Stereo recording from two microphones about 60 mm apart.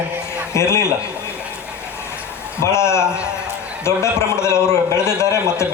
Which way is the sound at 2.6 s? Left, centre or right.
Left.